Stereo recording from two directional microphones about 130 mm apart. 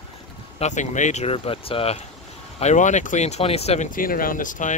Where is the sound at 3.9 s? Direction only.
90° left.